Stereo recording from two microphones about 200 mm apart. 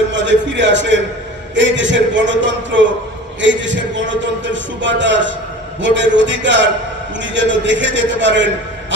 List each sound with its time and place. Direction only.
0.1 s a man's voice: 65° right (ahead or behind)